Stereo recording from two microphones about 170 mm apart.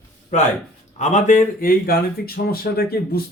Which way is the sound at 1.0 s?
45° left (ahead or behind).